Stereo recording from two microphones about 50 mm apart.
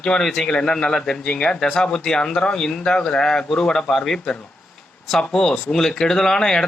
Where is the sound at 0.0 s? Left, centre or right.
Centre.